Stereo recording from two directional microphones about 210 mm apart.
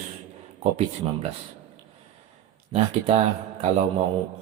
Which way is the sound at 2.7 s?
30° right (ahead or behind).